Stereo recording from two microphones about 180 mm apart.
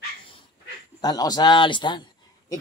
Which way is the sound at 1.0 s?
20° left (ahead or behind).